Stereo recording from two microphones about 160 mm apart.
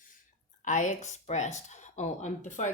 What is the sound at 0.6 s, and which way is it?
Speech, 50° left (ahead or behind).